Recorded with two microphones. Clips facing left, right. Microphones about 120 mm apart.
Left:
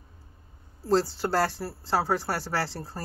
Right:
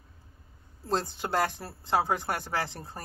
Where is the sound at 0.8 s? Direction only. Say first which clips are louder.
Left 6 dB; 20° right (ahead or behind).